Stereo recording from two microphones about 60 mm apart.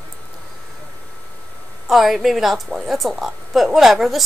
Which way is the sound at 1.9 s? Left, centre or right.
Centre.